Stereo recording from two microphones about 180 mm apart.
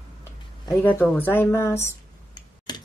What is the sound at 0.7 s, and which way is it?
A woman's voice, 10° left (ahead or behind).